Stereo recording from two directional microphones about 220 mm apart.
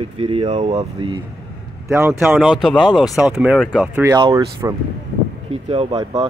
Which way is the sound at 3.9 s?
15° right (ahead or behind).